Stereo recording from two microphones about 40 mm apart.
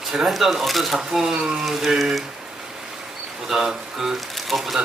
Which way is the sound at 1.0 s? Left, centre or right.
Centre.